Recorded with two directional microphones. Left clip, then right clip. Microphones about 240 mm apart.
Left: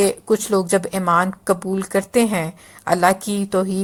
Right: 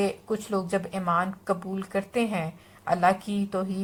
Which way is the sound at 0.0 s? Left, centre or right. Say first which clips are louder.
Left 10 dB; left.